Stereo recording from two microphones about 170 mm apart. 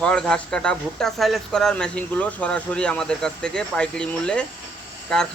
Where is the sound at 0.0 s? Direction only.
5° left (ahead or behind).